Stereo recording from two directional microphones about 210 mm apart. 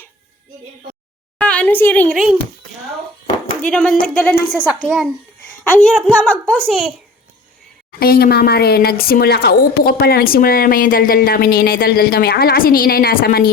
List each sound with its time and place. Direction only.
1.4 s a sound: 5° left (ahead or behind)
3.7 s a woman's voice: 5° left (ahead or behind)
7.9 s speech: 45° left (ahead or behind)